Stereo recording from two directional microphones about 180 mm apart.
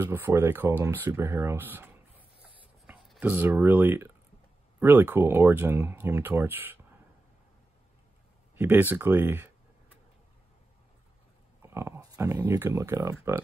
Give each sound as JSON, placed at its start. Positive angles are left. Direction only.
{"t": 0.0, "sound": "speech", "side_deg": -10}
{"t": 8.5, "sound": "speech", "side_deg": -10}
{"t": 11.6, "sound": "speech", "side_deg": -15}